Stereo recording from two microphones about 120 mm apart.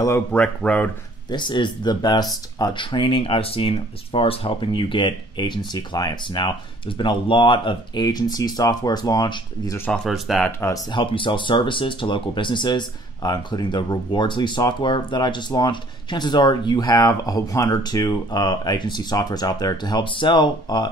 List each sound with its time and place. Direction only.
0.3 s speech: 10° left (ahead or behind)
1.3 s speech: 40° left (ahead or behind)
10.0 s speech: centre (ahead or behind)
10.9 s speech: 45° left (ahead or behind)